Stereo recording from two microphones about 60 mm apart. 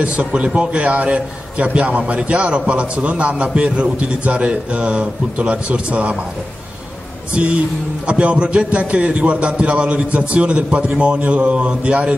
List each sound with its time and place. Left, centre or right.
0.2 s a man's voice: right
7.3 s a man's voice: centre